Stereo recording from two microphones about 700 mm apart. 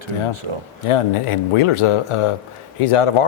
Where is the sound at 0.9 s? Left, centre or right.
Left.